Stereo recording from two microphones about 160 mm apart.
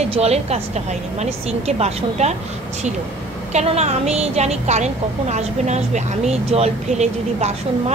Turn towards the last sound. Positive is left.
turn(degrees=-45)  # may be behind; listen again after turning